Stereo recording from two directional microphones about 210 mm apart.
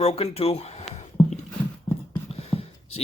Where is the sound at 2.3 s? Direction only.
30° left (ahead or behind).